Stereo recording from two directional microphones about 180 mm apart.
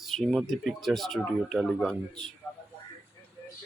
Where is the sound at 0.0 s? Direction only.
Centre (ahead or behind).